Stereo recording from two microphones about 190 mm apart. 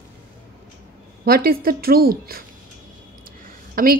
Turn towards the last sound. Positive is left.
turn(degrees=-50)  # may be behind; listen again after turning